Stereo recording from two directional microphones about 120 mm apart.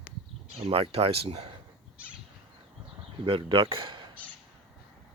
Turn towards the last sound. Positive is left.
turn(degrees=-40)  # may be behind; listen again after turning